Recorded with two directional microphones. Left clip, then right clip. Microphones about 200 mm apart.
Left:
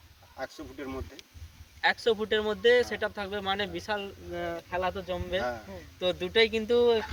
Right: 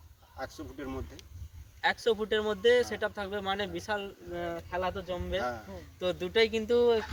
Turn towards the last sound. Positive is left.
turn(degrees=-20)  # may be behind; listen again after turning